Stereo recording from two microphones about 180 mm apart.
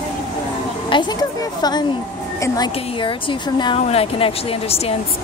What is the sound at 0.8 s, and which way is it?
A woman's voice, 25° left (ahead or behind).